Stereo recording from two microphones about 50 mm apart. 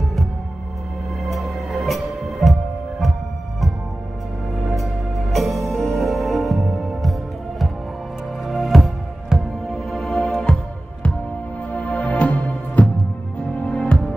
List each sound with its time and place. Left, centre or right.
1.3 s music: centre
4.7 s music: centre
11.7 s music: left